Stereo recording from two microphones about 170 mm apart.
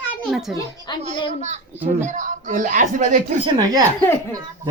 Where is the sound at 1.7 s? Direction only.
10° right (ahead or behind).